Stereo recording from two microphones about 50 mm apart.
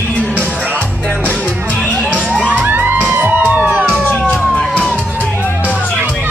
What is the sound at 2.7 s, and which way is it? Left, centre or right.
Music, right.